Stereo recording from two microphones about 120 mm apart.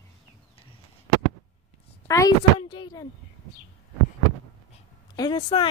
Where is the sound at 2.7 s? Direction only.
40° left (ahead or behind).